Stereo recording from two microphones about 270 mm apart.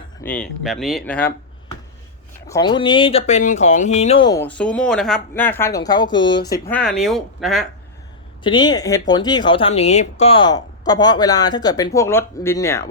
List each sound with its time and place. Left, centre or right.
0.2 s speech: centre
2.5 s speech: centre
8.4 s speech: centre